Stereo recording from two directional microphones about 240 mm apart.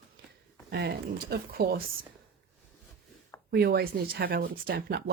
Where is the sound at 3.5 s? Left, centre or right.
Right.